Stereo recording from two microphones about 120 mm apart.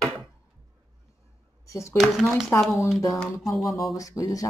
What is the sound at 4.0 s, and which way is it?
Speech, 30° left (ahead or behind).